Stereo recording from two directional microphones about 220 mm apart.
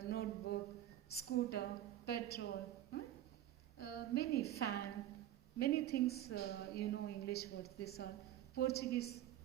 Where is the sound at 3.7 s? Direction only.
45° left (ahead or behind).